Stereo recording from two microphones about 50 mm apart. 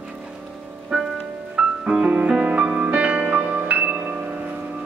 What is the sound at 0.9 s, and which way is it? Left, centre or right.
Music, right.